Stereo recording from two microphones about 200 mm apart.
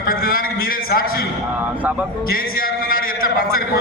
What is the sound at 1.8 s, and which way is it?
Speech, 5° right (ahead or behind).